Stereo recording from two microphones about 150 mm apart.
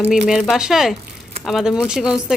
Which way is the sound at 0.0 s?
5° right (ahead or behind).